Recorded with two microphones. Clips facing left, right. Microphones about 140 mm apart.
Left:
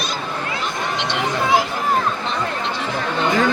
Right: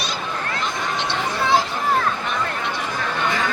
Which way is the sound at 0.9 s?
15° left (ahead or behind).